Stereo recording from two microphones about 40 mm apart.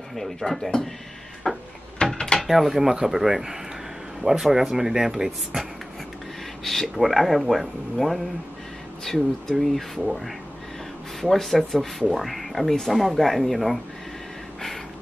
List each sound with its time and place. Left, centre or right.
0.1 s speech: centre
1.5 s music: centre
2.0 s mechanisms: left
2.4 s speech: centre
6.6 s speech: centre